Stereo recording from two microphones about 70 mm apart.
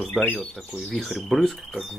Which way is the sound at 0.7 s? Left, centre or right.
Centre.